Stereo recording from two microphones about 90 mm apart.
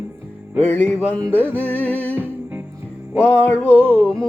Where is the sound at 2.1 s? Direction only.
20° right (ahead or behind).